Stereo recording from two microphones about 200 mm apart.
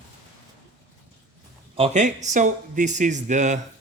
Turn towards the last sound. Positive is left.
turn(degrees=-35)  # may be behind; listen again after turning